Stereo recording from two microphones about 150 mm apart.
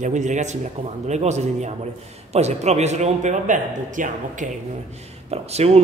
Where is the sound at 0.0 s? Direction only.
55° right (ahead or behind).